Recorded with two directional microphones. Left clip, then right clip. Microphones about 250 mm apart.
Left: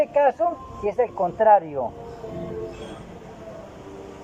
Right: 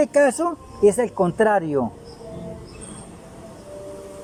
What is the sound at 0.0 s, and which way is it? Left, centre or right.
Speech, right.